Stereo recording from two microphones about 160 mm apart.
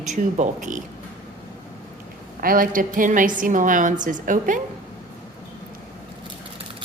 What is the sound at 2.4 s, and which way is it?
A woman's voice, 60° right (ahead or behind).